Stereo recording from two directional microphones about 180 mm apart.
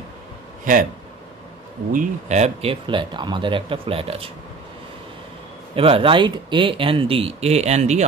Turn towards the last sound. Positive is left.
turn(degrees=-40)  # may be behind; listen again after turning